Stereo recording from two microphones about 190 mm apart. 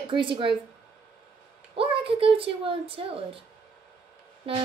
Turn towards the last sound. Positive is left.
turn(degrees=-30)  # may be behind; listen again after turning